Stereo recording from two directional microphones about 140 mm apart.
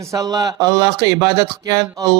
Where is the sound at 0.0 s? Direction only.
25° right (ahead or behind).